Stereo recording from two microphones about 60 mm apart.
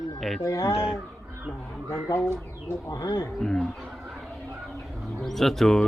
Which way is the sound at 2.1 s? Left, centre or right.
Left.